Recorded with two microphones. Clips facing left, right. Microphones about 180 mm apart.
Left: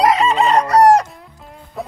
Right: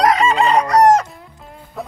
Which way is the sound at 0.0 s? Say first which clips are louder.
Even; centre (ahead or behind).